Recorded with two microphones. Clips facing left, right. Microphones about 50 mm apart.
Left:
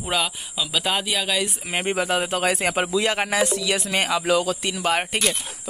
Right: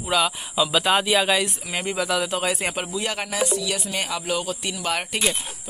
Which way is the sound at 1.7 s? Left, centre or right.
Left.